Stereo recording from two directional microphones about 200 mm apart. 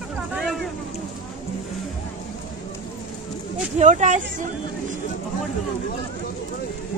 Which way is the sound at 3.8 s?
35° right (ahead or behind).